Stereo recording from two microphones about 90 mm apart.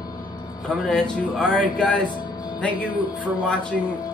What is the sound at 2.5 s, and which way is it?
Speech, 15° left (ahead or behind).